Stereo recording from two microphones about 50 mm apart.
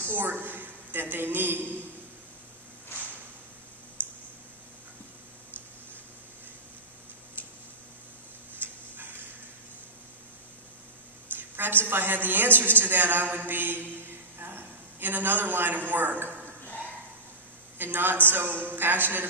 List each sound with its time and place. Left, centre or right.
0.0 s a woman's voice: right
4.0 s a sound: right
8.5 s dog: right
11.3 s a woman's voice: right
16.6 s dog: left
17.7 s a man's voice: right